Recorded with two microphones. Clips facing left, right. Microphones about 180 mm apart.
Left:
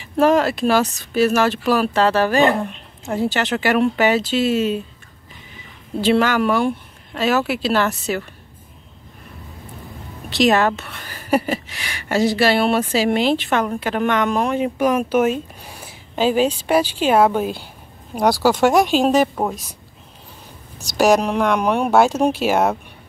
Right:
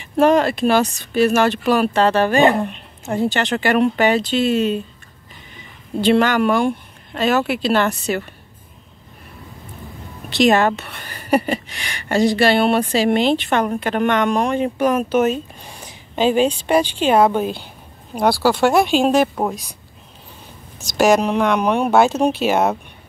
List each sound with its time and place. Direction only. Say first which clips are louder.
0.0 s a woman's voice: right 1 dB; centre (ahead or behind)
5.9 s a woman's voice: right 1 dB; 5° left (ahead or behind)
10.3 s a woman's voice: right 1 dB; centre (ahead or behind)
18.7 s a woman's voice: even; 10° left (ahead or behind)
19.0 s a woman's voice: even; centre (ahead or behind)
21.2 s a woman's voice: right 1 dB; centre (ahead or behind)